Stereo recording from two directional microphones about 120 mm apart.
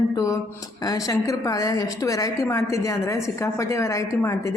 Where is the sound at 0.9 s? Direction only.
30° left (ahead or behind).